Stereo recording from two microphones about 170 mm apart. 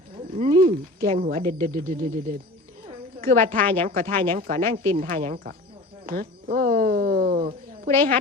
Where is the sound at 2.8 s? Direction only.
55° right (ahead or behind).